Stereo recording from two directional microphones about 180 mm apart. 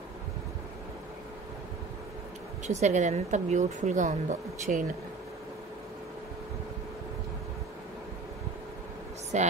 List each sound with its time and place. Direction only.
2.6 s a woman's voice: 40° right (ahead or behind)
9.3 s a woman's voice: 40° right (ahead or behind)